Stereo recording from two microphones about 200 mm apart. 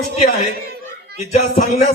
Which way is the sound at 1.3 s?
35° left (ahead or behind).